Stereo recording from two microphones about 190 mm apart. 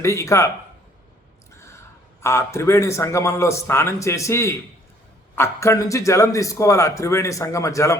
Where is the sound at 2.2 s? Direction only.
15° left (ahead or behind).